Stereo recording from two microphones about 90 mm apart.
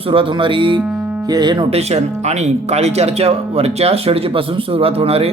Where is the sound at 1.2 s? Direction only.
50° right (ahead or behind).